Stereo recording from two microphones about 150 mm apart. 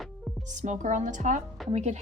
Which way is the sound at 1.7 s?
50° right (ahead or behind).